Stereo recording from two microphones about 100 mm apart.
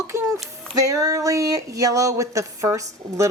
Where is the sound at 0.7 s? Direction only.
35° right (ahead or behind).